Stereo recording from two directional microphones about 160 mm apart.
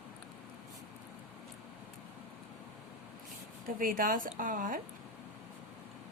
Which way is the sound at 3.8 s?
60° right (ahead or behind).